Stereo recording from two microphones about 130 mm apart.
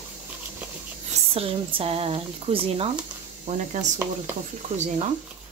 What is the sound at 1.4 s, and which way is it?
Speech, 45° right (ahead or behind).